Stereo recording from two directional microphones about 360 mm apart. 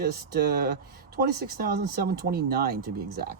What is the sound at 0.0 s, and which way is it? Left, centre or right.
Speech, right.